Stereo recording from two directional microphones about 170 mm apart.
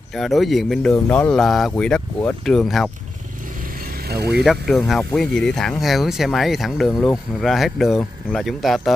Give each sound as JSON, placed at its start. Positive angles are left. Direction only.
{"t": 0.1, "sound": "speech", "side_deg": 0}
{"t": 0.9, "sound": "speech", "side_deg": 10}
{"t": 4.1, "sound": "speech", "side_deg": -75}
{"t": 4.5, "sound": "speech", "side_deg": 0}